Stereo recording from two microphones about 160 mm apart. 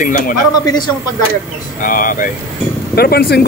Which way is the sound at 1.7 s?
60° left (ahead or behind).